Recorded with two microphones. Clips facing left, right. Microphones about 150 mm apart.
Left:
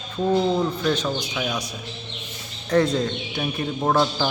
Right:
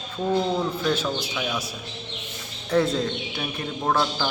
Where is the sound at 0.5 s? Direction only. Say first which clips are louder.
Left 2 dB; centre (ahead or behind).